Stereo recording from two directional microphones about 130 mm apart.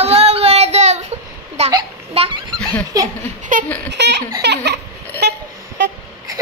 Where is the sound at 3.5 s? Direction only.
90° right.